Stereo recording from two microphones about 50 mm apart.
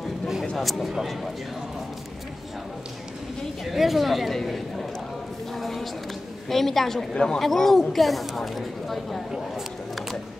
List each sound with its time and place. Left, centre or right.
0.6 s speech: centre
3.7 s speech: centre
5.6 s a sound: centre
6.5 s speech: centre